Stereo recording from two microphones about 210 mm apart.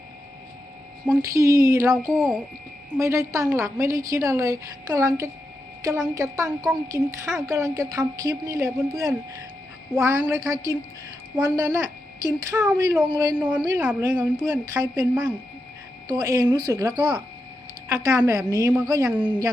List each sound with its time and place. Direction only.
1.0 s a woman's voice: 15° right (ahead or behind)
13.5 s speech: 5° right (ahead or behind)
14.0 s a woman's voice: 20° right (ahead or behind)